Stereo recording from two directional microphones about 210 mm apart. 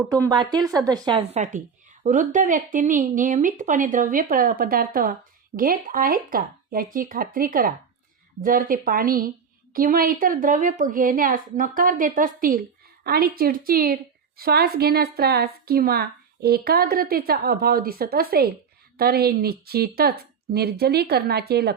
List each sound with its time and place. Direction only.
0.1 s a woman's voice: 15° right (ahead or behind)
1.4 s a woman's voice: 35° right (ahead or behind)